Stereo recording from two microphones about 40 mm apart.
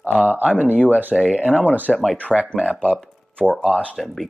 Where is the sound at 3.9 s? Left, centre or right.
Centre.